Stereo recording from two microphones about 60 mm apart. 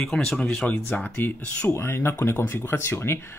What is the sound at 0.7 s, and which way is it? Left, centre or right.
Speech, left.